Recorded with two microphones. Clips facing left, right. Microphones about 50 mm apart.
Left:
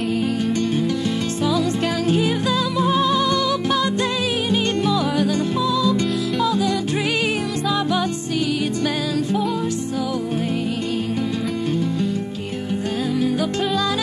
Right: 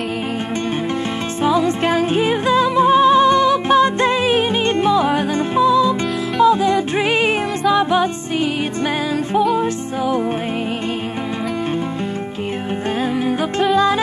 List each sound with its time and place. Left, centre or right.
1.4 s music: right